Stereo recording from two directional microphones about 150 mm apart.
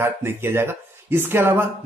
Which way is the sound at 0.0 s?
15° right (ahead or behind).